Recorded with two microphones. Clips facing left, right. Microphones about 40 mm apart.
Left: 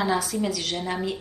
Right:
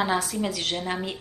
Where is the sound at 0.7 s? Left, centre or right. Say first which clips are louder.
Even; centre.